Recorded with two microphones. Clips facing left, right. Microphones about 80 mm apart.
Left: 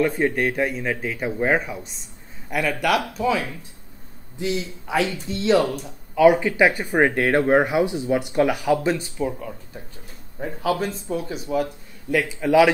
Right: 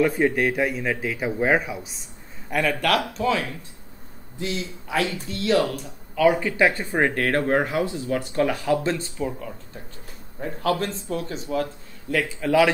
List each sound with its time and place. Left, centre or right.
0.0 s a man's voice: centre
9.2 s a man's voice: centre